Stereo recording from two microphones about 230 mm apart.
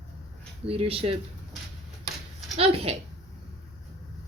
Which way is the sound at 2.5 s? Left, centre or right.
Right.